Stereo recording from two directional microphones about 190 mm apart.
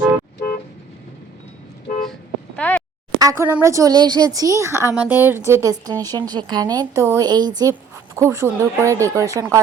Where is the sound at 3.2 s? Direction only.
15° right (ahead or behind).